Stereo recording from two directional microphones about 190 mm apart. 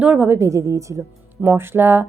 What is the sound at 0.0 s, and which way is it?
A woman's voice, 10° right (ahead or behind).